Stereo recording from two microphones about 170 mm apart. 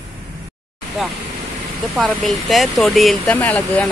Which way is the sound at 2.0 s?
Centre (ahead or behind).